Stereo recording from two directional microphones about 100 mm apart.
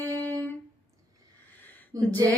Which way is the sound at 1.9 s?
40° right (ahead or behind).